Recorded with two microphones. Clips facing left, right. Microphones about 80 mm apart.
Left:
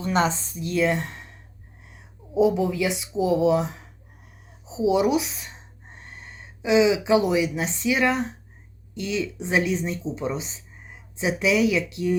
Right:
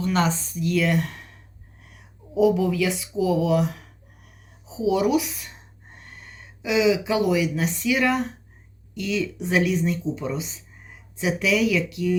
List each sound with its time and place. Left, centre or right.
0.0 s speech: left